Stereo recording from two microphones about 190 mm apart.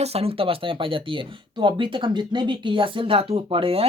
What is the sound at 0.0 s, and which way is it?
Speech, 30° right (ahead or behind).